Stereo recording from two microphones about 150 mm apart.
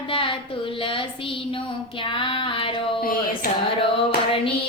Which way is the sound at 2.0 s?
35° left (ahead or behind).